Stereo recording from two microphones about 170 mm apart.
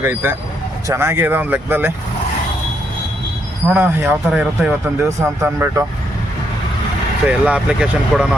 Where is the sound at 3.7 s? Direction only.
10° right (ahead or behind).